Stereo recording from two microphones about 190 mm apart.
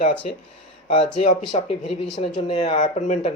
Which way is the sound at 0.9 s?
30° left (ahead or behind).